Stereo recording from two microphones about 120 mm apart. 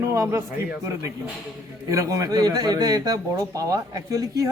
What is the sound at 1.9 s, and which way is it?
Speech, 30° right (ahead or behind).